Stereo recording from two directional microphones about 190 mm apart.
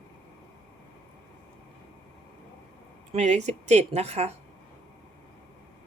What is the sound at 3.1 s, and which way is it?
Speech, 35° right (ahead or behind).